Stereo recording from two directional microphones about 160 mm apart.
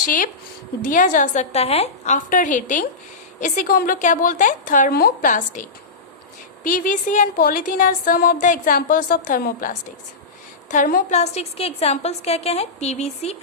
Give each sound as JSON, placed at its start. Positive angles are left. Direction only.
{"t": 0.0, "sound": "a woman's voice", "side_deg": 55}
{"t": 6.7, "sound": "a woman's voice", "side_deg": 55}